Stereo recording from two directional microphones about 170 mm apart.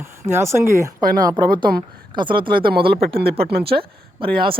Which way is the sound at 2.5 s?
65° right (ahead or behind).